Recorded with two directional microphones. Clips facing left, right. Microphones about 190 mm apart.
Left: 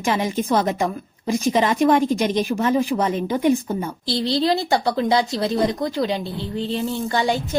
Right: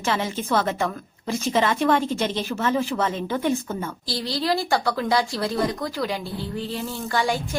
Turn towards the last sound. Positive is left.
turn(degrees=20)  # may be behind; listen again after turning